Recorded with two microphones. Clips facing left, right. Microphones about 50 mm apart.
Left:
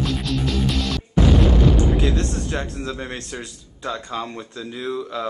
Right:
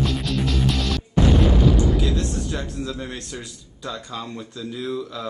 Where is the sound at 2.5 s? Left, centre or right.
Left.